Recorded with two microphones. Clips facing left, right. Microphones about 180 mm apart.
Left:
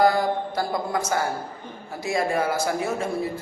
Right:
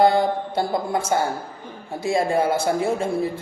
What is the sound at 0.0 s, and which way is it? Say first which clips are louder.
A man's voice: right 3 dB; 25° right (ahead or behind).